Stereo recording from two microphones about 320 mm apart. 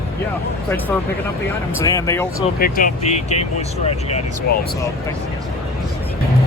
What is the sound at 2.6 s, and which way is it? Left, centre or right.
Speech, left.